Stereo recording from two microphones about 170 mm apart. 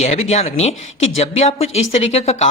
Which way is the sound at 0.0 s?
40° left (ahead or behind).